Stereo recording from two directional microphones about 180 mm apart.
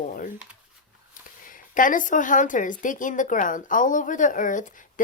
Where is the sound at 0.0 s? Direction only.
50° left (ahead or behind).